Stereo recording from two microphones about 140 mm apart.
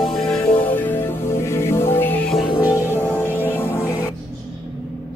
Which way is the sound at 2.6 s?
15° right (ahead or behind).